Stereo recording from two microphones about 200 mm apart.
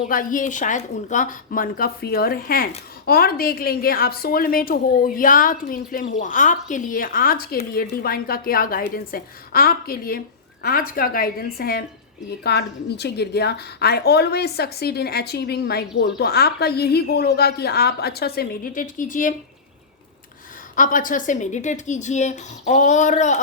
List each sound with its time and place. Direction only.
0.0 s a woman's voice: 40° left (ahead or behind)
20.7 s speech: 40° left (ahead or behind)